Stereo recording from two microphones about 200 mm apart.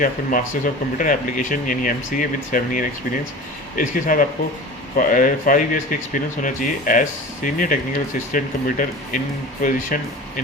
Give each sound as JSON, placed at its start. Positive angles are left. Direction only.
{"t": 0.0, "sound": "speech", "side_deg": 40}